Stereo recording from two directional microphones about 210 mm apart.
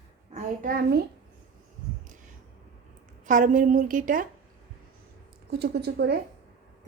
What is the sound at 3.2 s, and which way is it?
Speech, 40° right (ahead or behind).